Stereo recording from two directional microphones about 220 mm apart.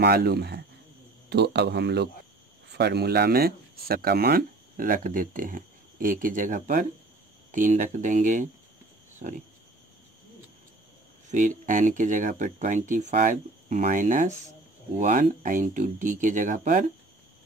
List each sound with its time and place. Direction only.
0.0 s speech: 45° right (ahead or behind)
11.2 s speech: 35° right (ahead or behind)